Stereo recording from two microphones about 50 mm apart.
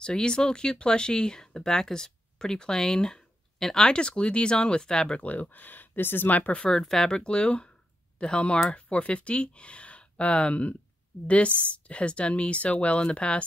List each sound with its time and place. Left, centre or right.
0.0 s speech: centre
5.2 s speech: left
6.5 s speech: left
6.8 s speech: centre